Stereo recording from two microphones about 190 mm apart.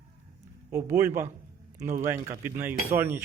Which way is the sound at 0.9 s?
15° right (ahead or behind).